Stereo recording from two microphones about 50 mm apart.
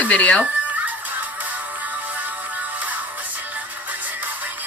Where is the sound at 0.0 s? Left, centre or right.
Left.